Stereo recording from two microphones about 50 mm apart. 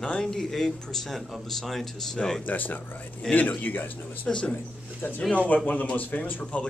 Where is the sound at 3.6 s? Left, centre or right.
Left.